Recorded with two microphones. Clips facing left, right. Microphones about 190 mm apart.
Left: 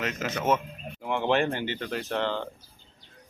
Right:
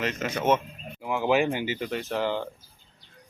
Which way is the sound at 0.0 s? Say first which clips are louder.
Right 2 dB; centre (ahead or behind).